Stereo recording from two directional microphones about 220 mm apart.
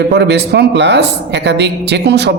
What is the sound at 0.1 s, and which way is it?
Speech, 50° right (ahead or behind).